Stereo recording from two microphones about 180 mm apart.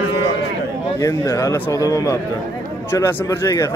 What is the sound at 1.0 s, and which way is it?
Speech, 20° left (ahead or behind).